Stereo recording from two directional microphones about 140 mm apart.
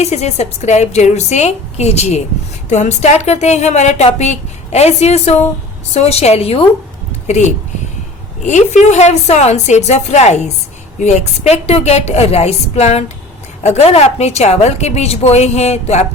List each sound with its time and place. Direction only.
0.0 s a woman's voice: 50° left (ahead or behind)